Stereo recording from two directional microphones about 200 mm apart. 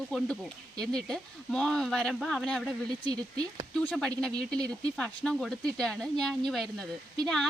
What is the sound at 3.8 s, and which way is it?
Speech, 5° left (ahead or behind).